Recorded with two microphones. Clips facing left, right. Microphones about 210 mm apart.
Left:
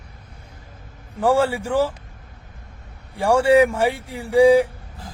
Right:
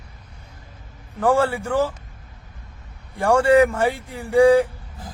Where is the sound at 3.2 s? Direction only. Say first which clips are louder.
Even; 10° left (ahead or behind).